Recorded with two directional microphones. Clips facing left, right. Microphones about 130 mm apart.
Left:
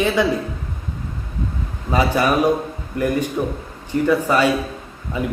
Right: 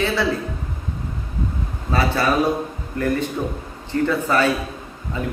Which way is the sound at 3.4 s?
5° left (ahead or behind).